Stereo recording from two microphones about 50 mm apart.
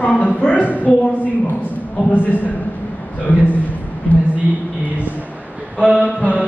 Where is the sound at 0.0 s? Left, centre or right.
Left.